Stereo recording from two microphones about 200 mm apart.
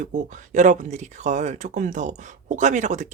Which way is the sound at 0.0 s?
40° right (ahead or behind).